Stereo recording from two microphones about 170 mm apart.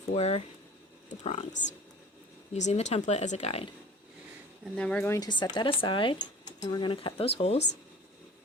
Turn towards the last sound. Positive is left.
turn(degrees=35)  # may be behind; listen again after turning